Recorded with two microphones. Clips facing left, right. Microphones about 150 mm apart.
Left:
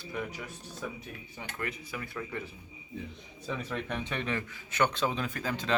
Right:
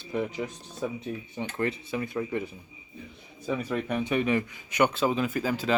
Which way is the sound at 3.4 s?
10° right (ahead or behind).